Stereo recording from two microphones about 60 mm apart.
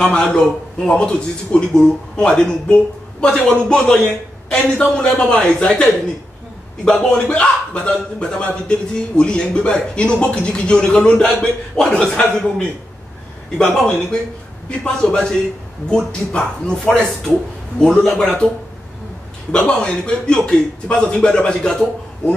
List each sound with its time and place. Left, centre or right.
0.0 s a man's voice: centre
19.5 s a man's voice: centre